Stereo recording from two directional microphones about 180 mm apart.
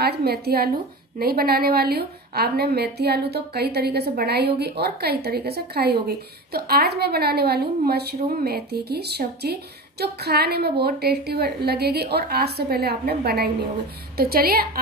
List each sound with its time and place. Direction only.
0.0 s a woman's voice: 60° right (ahead or behind)